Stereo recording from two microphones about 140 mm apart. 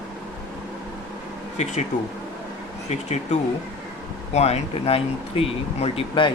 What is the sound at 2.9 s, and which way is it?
Speech, 50° left (ahead or behind).